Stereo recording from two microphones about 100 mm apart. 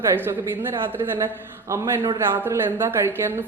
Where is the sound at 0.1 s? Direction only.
25° right (ahead or behind).